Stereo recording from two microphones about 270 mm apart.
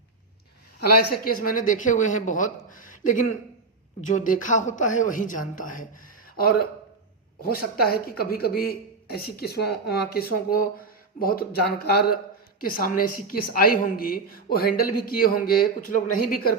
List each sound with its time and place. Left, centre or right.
0.8 s a woman's voice: left